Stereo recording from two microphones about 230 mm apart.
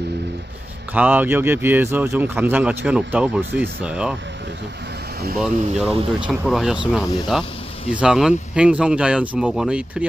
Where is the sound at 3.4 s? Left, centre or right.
Right.